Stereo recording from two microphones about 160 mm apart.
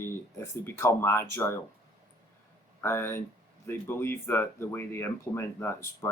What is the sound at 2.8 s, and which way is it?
Speech, 15° left (ahead or behind).